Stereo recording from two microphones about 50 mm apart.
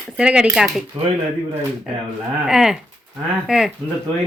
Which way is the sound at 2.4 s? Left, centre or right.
Centre.